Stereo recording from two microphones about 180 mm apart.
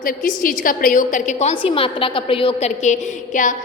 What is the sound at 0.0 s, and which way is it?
A woman's voice, 50° left (ahead or behind).